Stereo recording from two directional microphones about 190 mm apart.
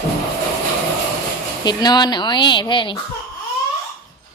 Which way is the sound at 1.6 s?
20° left (ahead or behind).